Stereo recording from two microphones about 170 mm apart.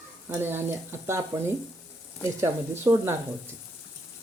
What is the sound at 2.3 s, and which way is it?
Speech, 15° right (ahead or behind).